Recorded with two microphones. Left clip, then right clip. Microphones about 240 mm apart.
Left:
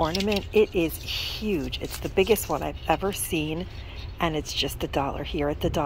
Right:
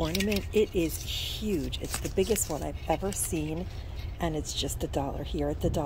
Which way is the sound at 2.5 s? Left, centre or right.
Left.